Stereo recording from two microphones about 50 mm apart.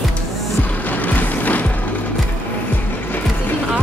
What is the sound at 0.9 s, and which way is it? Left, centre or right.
Music, left.